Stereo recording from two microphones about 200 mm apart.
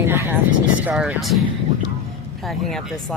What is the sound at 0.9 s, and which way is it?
Speech, 5° right (ahead or behind).